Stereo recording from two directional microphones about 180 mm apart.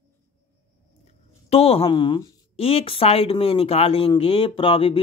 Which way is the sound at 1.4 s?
35° left (ahead or behind).